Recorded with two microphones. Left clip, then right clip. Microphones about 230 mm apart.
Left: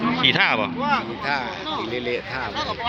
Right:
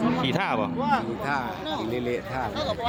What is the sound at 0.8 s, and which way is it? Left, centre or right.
Speech, right.